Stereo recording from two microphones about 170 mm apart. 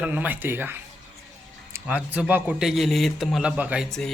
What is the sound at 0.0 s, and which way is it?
A man's voice, 10° right (ahead or behind).